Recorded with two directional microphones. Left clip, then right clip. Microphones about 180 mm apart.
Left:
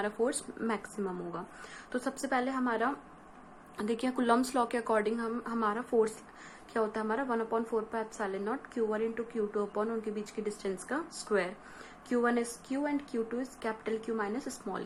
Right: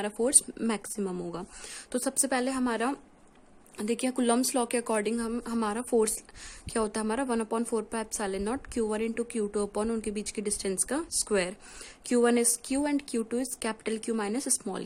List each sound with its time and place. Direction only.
0.0 s a woman's voice: 45° right (ahead or behind)